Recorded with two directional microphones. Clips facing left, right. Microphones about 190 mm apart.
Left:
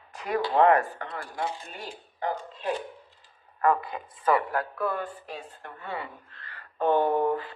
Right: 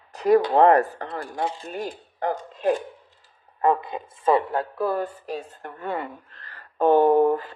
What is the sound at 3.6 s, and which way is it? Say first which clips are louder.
Speech: right 3 dB; 25° right (ahead or behind).